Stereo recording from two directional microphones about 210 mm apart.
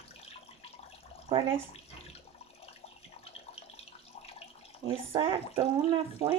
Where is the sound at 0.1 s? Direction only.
30° left (ahead or behind).